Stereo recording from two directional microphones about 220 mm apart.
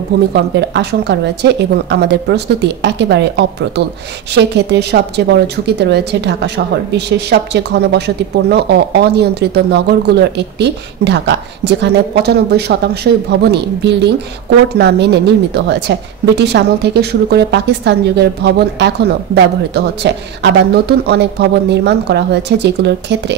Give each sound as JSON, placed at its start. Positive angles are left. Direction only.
{"t": 0.3, "sound": "a woman's voice", "side_deg": -50}